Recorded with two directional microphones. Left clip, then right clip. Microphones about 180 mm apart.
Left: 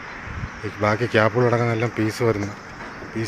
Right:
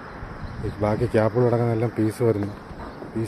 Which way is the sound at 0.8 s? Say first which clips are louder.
Left 3 dB; 5° right (ahead or behind).